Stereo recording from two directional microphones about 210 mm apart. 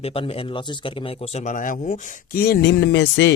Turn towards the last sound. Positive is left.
turn(degrees=55)  # may be behind; listen again after turning